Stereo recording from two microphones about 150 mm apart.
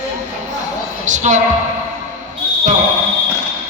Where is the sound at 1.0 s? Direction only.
55° right (ahead or behind).